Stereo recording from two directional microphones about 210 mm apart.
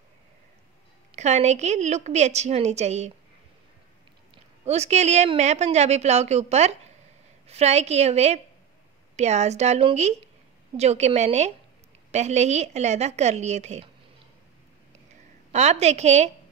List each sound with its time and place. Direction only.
1.1 s a woman's voice: 30° right (ahead or behind)
4.6 s a woman's voice: 30° right (ahead or behind)
15.5 s a woman's voice: 30° right (ahead or behind)